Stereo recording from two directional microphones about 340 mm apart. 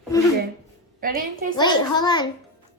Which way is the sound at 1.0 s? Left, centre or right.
Right.